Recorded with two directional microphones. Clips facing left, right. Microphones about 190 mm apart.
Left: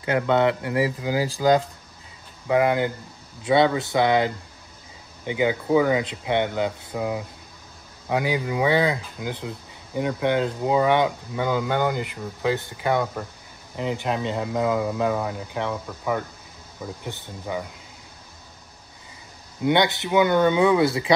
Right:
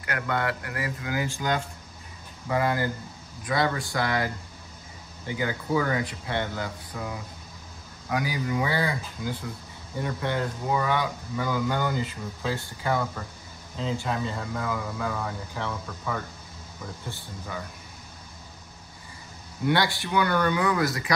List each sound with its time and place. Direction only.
0.3 s speech: 20° left (ahead or behind)
2.4 s speech: 15° left (ahead or behind)
19.6 s speech: 20° left (ahead or behind)